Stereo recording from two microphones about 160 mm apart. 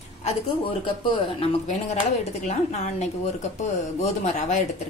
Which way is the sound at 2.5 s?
45° left (ahead or behind).